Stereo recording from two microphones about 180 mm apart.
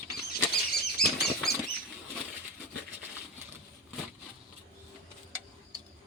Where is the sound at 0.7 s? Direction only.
60° left (ahead or behind).